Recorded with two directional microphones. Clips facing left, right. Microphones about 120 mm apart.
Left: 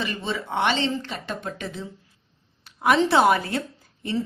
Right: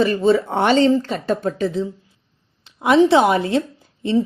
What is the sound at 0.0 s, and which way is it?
A woman's voice, 40° right (ahead or behind).